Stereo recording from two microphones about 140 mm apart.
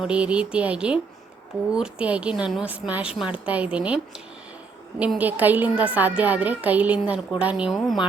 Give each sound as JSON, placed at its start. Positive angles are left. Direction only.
{"t": 0.0, "sound": "a woman's voice", "side_deg": -10}